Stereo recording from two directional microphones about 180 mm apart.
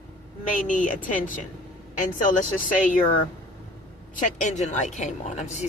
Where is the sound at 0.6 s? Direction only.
45° left (ahead or behind).